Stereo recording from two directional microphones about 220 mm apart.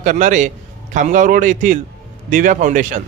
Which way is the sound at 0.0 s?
35° right (ahead or behind).